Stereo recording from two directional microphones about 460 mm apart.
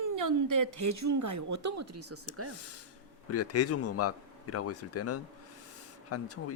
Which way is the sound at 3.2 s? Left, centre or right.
Left.